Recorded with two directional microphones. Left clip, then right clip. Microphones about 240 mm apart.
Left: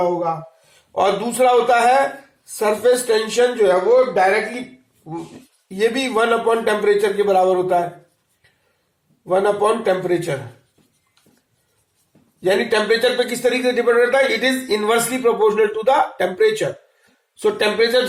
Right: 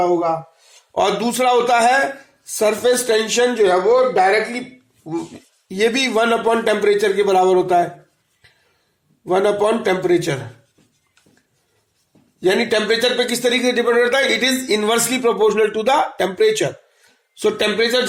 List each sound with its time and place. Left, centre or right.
0.9 s a man's voice: right
5.0 s a man's voice: right
9.2 s a man's voice: right
12.4 s a man's voice: right